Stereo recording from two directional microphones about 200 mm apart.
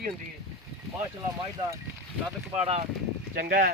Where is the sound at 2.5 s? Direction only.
35° right (ahead or behind).